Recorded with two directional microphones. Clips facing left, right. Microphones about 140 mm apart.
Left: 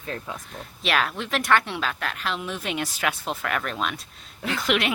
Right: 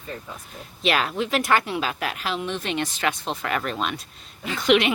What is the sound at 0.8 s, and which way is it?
A woman's voice, centre (ahead or behind).